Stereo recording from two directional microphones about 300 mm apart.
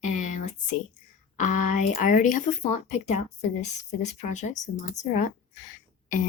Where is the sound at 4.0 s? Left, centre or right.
Left.